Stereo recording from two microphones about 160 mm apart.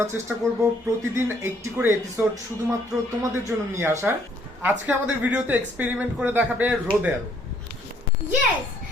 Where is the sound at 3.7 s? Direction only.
15° right (ahead or behind).